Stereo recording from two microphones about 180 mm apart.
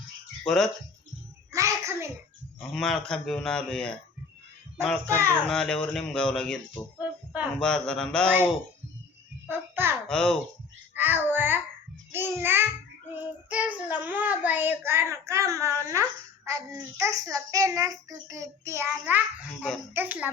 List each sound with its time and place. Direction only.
0.4 s speech: centre (ahead or behind)
1.5 s a sound: 15° right (ahead or behind)
2.6 s speech: centre (ahead or behind)
5.0 s a child's voice: 15° right (ahead or behind)
5.3 s speech: 5° left (ahead or behind)
7.0 s a sound: 10° right (ahead or behind)
7.6 s speech: 5° left (ahead or behind)
9.5 s babbling: 10° right (ahead or behind)
10.1 s a child's voice: 5° left (ahead or behind)
10.9 s a child's voice: 10° right (ahead or behind)